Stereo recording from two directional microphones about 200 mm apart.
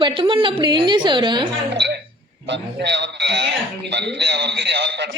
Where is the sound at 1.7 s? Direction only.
60° right (ahead or behind).